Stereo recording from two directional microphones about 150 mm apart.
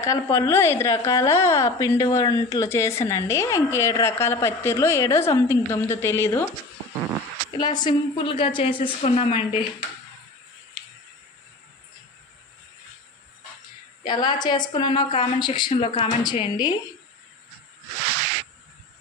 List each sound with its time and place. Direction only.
0.0 s a woman's voice: 20° left (ahead or behind)
7.5 s a woman's voice: 30° left (ahead or behind)
14.0 s a woman's voice: 30° left (ahead or behind)
16.2 s a woman's voice: 30° left (ahead or behind)